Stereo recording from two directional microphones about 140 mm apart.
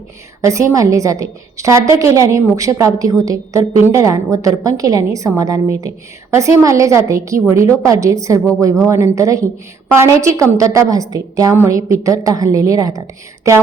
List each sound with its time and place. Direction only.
0.4 s a woman's voice: 20° right (ahead or behind)